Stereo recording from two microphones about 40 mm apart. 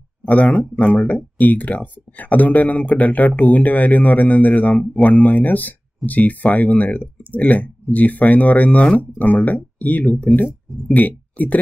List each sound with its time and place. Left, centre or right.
0.2 s speech: left